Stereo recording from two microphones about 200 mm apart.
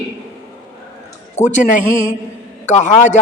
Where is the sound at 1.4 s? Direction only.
35° left (ahead or behind).